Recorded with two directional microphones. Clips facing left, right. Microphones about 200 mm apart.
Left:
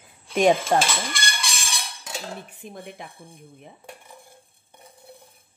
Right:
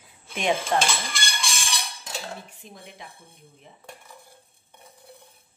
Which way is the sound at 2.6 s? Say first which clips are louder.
Left 6 dB; 55° left (ahead or behind).